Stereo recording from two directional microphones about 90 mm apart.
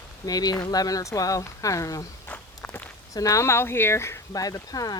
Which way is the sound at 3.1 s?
40° left (ahead or behind).